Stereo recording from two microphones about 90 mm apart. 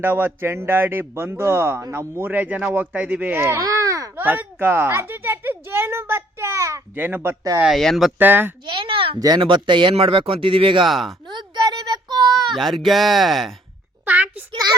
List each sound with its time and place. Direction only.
0.0 s speech: 25° right (ahead or behind)
3.6 s babbling: 40° right (ahead or behind)
4.2 s a sound: 20° right (ahead or behind)
6.9 s speech: 20° right (ahead or behind)
7.8 s speech: centre (ahead or behind)
8.2 s speech: 20° right (ahead or behind)
8.6 s a sound: 70° right (ahead or behind)
9.1 s speech: 45° right (ahead or behind)
9.4 s speech: 60° right (ahead or behind); by 10.8 s 85° right
10.8 s speech: centre (ahead or behind)
11.3 s a sound: 55° right (ahead or behind)
12.5 s speech: centre (ahead or behind)
14.1 s a child's voice: 20° right (ahead or behind)